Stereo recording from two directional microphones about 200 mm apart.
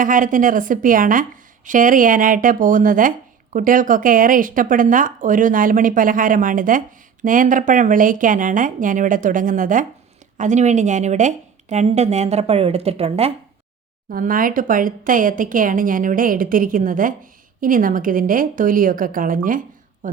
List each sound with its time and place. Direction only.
0.0 s speech: 40° right (ahead or behind)
14.1 s speech: 45° right (ahead or behind)